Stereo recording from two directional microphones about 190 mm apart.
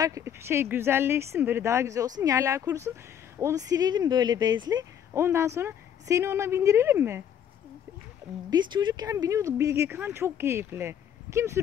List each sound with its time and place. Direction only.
0.0 s speech: 15° right (ahead or behind)
8.5 s speech: 25° right (ahead or behind)